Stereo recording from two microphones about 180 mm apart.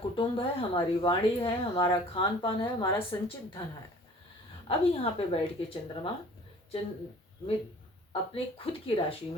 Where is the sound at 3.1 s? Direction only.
30° left (ahead or behind).